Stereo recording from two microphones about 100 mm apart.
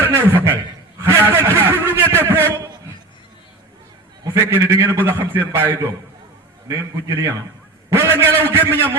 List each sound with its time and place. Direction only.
0.0 s a man's voice: 25° right (ahead or behind)
4.2 s a man's voice: 30° right (ahead or behind)
7.9 s a man's voice: 25° right (ahead or behind)